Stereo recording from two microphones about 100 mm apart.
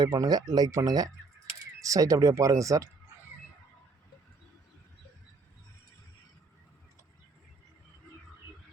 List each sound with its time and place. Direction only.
0.0 s speech: 40° right (ahead or behind)